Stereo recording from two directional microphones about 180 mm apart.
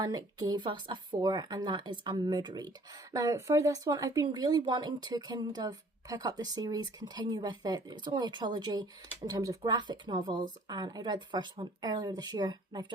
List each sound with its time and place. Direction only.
0.0 s speech: 20° right (ahead or behind)